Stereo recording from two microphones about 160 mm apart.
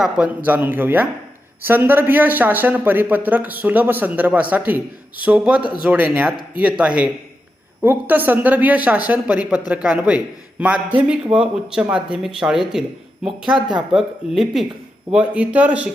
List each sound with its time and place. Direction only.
0.0 s a man's voice: 10° right (ahead or behind)